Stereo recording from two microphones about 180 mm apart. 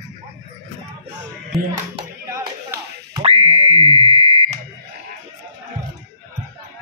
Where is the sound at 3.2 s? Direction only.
35° right (ahead or behind).